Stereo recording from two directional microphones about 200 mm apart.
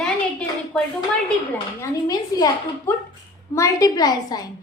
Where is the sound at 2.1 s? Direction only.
20° left (ahead or behind).